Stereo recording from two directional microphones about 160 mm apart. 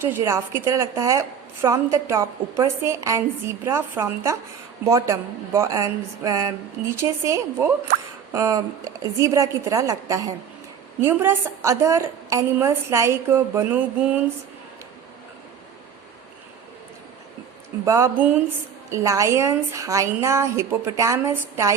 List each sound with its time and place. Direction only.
0.0 s a woman's voice: 15° right (ahead or behind)
17.8 s speech: 20° right (ahead or behind)